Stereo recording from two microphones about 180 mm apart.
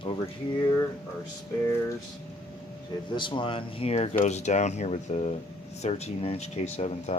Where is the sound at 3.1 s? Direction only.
25° left (ahead or behind).